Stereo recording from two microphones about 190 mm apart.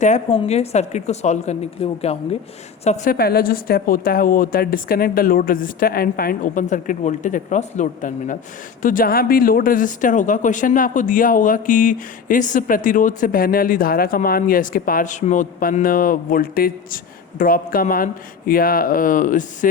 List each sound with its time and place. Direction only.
0.0 s a woman's voice: 35° left (ahead or behind)